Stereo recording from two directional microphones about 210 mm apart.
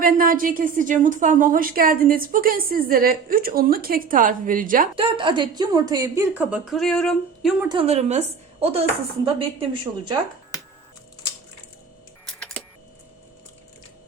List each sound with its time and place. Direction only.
0.0 s a woman's voice: 40° right (ahead or behind)
4.9 s a woman's voice: 25° right (ahead or behind); by 7.5 s centre (ahead or behind)
7.7 s a woman's voice: 25° right (ahead or behind)